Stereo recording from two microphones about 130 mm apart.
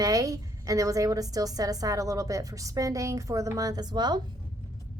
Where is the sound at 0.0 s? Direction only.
25° right (ahead or behind).